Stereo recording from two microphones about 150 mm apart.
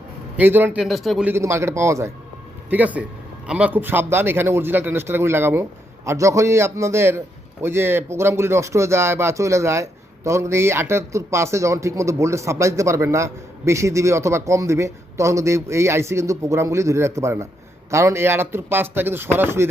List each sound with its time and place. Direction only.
0.3 s a man's voice: 15° right (ahead or behind)
0.9 s speech: centre (ahead or behind)
1.2 s a man's voice: 15° right (ahead or behind)